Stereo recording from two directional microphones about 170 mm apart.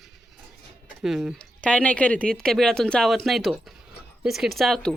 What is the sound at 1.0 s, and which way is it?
Speech, centre (ahead or behind).